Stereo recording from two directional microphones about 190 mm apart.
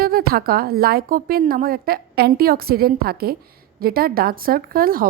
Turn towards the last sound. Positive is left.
turn(degrees=-50)  # may be behind; listen again after turning